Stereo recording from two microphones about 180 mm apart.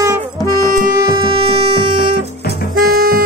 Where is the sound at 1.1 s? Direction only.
30° right (ahead or behind).